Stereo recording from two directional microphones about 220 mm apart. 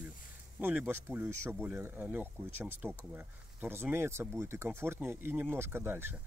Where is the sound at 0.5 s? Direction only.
5° right (ahead or behind).